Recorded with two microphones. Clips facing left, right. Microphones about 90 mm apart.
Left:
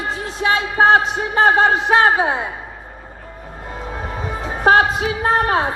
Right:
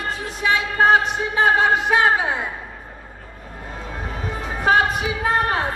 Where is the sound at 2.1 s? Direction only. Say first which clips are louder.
Left 3 dB; 25° left (ahead or behind).